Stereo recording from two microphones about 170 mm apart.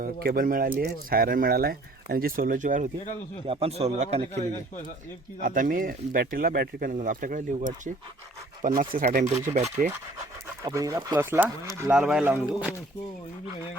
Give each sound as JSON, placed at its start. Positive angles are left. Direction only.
{"t": 0.0, "sound": "speech", "side_deg": -60}
{"t": 3.4, "sound": "a man's voice", "side_deg": -35}
{"t": 5.4, "sound": "speech", "side_deg": -55}
{"t": 9.5, "sound": "a man's voice", "side_deg": -40}
{"t": 10.6, "sound": "speech", "side_deg": -20}